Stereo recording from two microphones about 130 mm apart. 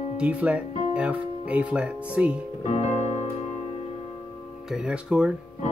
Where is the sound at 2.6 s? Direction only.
60° left (ahead or behind).